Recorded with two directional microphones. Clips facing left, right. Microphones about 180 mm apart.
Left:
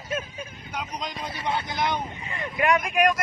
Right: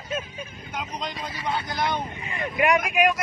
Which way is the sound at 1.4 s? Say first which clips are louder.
Even; 20° left (ahead or behind).